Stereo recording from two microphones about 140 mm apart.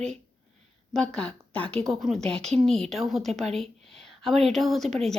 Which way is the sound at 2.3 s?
50° right (ahead or behind).